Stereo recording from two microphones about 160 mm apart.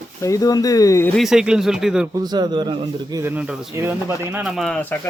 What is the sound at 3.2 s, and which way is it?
Speech, 10° right (ahead or behind).